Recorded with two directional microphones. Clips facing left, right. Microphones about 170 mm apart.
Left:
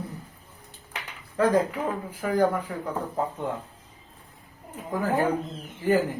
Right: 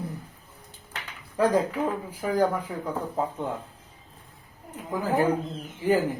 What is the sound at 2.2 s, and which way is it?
Speech, 10° right (ahead or behind).